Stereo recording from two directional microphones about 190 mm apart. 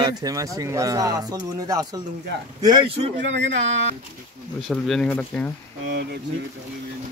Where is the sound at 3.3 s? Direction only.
70° right (ahead or behind).